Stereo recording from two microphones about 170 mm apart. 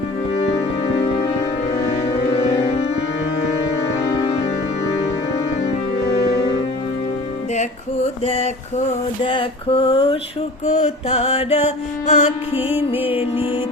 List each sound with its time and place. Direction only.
8.2 s a sound: 40° left (ahead or behind)
10.7 s mantra: 40° left (ahead or behind)
12.5 s music: 10° right (ahead or behind)
13.1 s music: 30° left (ahead or behind)